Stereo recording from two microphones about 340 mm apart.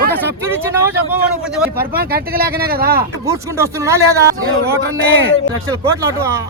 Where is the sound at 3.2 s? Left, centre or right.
Centre.